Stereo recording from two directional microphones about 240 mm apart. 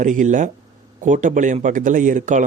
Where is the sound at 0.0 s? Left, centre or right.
Right.